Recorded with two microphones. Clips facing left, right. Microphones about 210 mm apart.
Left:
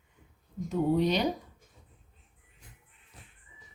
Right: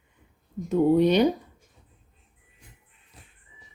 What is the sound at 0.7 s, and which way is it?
Speech, 55° right (ahead or behind).